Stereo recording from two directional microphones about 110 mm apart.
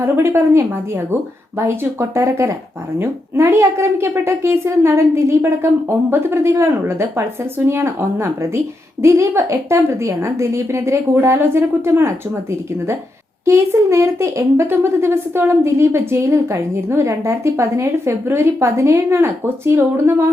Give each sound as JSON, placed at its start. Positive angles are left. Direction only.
{"t": 0.0, "sound": "speech", "side_deg": -25}
{"t": 13.4, "sound": "speech", "side_deg": -25}